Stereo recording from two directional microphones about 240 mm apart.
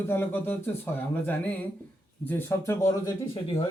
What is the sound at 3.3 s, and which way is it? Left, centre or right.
Speech, left.